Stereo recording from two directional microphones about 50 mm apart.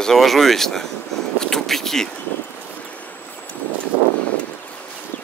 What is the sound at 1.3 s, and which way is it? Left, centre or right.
Vehicle, centre.